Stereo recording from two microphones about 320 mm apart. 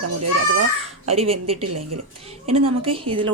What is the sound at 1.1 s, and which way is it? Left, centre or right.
Speech, centre.